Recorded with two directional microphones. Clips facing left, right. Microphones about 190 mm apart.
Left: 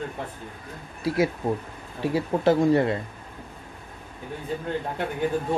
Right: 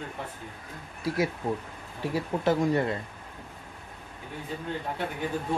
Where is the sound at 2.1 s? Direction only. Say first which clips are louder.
Left 5 dB; 30° left (ahead or behind).